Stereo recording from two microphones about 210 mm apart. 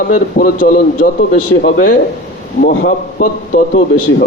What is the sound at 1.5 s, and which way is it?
Speech, 65° left (ahead or behind).